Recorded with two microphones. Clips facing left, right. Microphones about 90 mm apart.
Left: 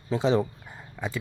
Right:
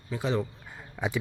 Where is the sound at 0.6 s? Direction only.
Centre (ahead or behind).